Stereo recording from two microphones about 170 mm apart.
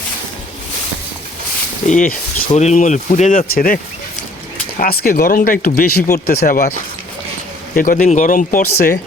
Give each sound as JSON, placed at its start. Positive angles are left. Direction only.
{"t": 1.9, "sound": "speech", "side_deg": 50}
{"t": 2.5, "sound": "speech", "side_deg": 40}
{"t": 4.8, "sound": "speech", "side_deg": 60}
{"t": 7.8, "sound": "speech", "side_deg": 55}